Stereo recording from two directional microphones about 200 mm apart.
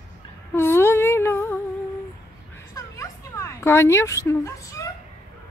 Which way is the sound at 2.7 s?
15° left (ahead or behind).